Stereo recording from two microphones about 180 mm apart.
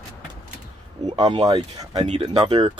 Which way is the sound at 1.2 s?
20° right (ahead or behind).